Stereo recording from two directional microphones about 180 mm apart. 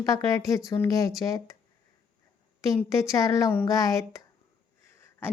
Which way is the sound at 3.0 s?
15° left (ahead or behind).